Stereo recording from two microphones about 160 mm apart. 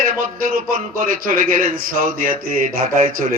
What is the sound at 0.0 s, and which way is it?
A man's voice, 55° right (ahead or behind).